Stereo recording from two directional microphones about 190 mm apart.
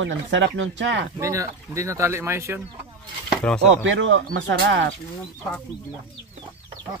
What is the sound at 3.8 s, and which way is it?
Speech, 85° right.